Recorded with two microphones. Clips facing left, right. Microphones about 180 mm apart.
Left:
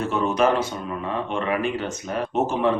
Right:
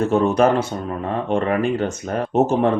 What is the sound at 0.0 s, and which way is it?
Speech, 50° right (ahead or behind).